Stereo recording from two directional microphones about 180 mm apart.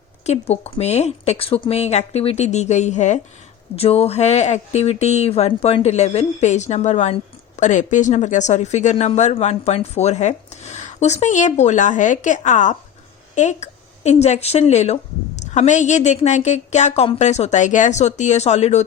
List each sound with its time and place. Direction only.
0.3 s a woman's voice: 35° left (ahead or behind)